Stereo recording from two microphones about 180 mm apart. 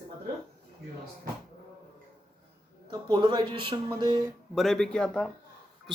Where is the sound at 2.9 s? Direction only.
25° right (ahead or behind).